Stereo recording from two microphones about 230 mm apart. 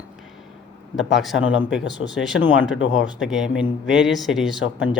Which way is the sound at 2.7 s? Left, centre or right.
Left.